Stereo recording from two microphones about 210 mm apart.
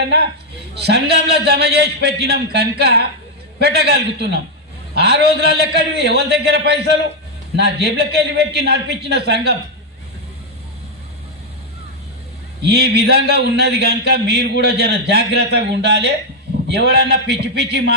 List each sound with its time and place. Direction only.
0.8 s a man's voice: 50° right (ahead or behind)
12.6 s a man's voice: 50° right (ahead or behind)